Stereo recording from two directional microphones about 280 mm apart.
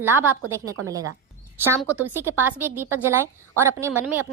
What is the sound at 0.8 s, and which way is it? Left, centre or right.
Speech, right.